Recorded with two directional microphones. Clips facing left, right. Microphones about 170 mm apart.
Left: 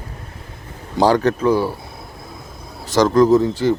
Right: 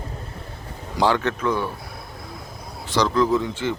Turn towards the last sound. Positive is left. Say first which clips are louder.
# left 8 dB
turn(degrees=40)  # may be behind; listen again after turning